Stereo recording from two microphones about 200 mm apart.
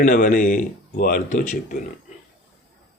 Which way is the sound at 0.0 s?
45° left (ahead or behind).